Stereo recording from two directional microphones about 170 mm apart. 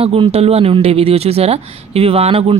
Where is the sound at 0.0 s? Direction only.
35° right (ahead or behind).